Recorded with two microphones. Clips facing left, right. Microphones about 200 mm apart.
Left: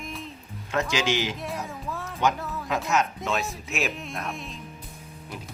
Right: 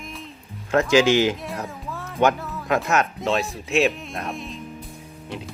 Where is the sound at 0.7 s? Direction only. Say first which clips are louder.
Right 9 dB; 50° right (ahead or behind).